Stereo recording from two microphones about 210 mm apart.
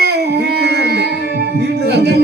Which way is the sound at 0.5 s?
50° right (ahead or behind).